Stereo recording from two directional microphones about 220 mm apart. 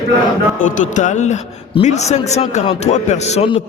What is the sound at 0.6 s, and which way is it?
A man's voice, 35° left (ahead or behind).